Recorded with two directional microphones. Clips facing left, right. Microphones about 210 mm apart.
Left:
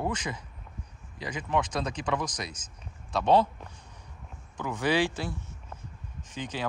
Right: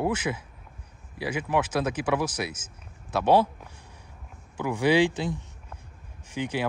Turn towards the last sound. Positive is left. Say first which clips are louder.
# right 6 dB
turn(degrees=-10)  # may be behind; listen again after turning